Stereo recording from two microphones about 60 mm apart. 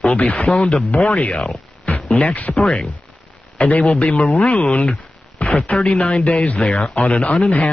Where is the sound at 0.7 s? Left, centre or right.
Centre.